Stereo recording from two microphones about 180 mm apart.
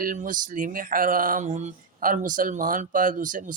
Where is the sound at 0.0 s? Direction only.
50° right (ahead or behind).